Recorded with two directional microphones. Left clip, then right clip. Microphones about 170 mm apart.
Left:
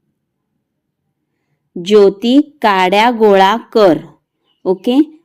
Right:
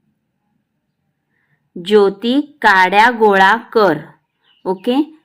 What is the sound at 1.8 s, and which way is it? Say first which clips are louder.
A woman's voice: left 3 dB; 20° left (ahead or behind).